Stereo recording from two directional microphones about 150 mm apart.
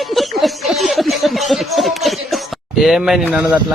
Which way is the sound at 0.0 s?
Centre (ahead or behind).